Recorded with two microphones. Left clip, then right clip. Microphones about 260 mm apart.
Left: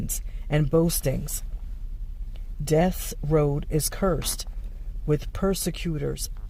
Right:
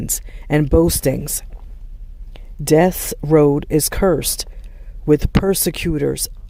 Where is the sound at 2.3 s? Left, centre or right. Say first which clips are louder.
Right 9 dB; right.